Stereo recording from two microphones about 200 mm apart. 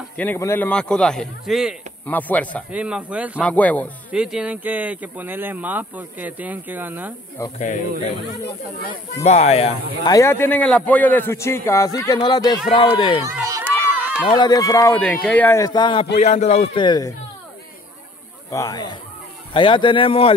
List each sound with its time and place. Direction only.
0.2 s a man's voice: 10° left (ahead or behind)
2.0 s a man's voice: 10° left (ahead or behind)
2.7 s speech: 5° right (ahead or behind)
3.3 s a man's voice: 5° left (ahead or behind)
4.1 s speech: 5° right (ahead or behind)
7.5 s a man's voice: 40° left (ahead or behind)
9.1 s a man's voice: 35° left (ahead or behind)
10.0 s a man's voice: 15° left (ahead or behind)
13.2 s speech: 15° right (ahead or behind)
14.2 s a man's voice: 20° left (ahead or behind)
16.2 s a man's voice: 35° left (ahead or behind)
18.5 s speech: 15° left (ahead or behind)